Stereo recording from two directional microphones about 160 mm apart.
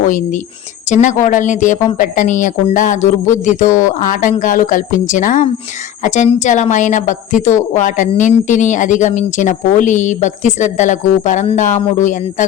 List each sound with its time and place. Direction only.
0.0 s a woman's voice: 55° left (ahead or behind)